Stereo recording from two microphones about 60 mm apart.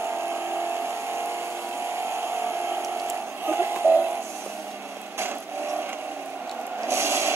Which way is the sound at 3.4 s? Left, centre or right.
Right.